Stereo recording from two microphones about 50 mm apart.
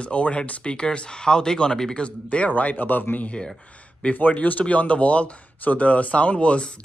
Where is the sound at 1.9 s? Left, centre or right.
Left.